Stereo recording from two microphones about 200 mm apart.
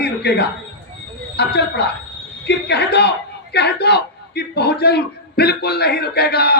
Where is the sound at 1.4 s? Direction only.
55° left (ahead or behind).